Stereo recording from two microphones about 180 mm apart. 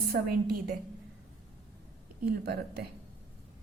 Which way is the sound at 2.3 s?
60° right (ahead or behind).